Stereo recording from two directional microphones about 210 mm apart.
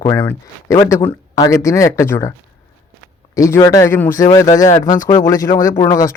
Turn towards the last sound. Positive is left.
turn(degrees=20)  # may be behind; listen again after turning